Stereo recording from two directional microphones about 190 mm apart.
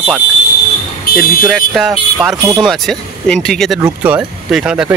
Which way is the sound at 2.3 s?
20° right (ahead or behind).